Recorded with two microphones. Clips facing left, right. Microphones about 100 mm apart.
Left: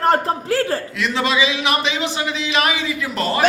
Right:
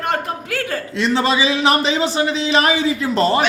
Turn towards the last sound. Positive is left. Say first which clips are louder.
# right 5 dB
turn(degrees=-30)  # may be behind; listen again after turning